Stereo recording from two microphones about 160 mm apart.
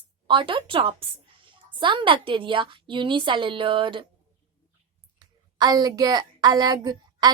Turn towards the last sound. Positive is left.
turn(degrees=-25)  # may be behind; listen again after turning